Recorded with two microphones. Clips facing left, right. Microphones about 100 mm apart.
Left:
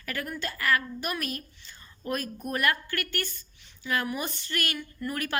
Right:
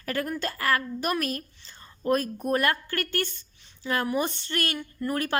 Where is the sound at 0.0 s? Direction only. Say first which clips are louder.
Right 5 dB; 35° right (ahead or behind).